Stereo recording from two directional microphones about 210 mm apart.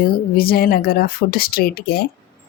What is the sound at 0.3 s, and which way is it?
Speech, 45° left (ahead or behind).